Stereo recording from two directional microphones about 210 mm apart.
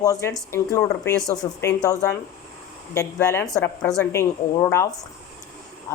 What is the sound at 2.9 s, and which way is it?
A woman's voice, 10° left (ahead or behind).